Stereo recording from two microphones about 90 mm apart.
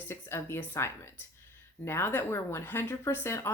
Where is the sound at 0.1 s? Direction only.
30° left (ahead or behind).